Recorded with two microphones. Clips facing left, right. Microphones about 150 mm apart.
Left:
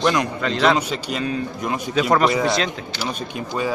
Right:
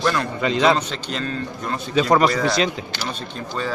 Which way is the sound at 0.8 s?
10° left (ahead or behind).